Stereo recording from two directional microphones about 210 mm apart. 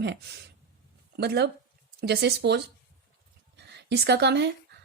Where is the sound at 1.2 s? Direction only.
50° right (ahead or behind).